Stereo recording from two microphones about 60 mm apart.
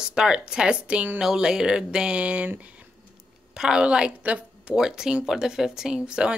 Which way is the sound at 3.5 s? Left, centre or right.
Centre.